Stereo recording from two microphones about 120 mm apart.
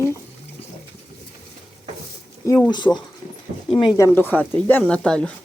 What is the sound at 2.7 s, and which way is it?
Speech, 40° left (ahead or behind).